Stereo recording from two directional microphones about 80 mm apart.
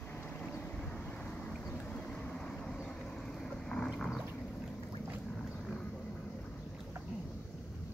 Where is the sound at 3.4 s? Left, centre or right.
Centre.